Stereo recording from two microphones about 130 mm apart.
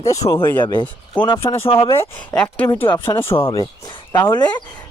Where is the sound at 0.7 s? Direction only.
40° left (ahead or behind).